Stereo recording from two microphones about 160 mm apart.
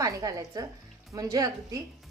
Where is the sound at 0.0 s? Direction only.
20° right (ahead or behind).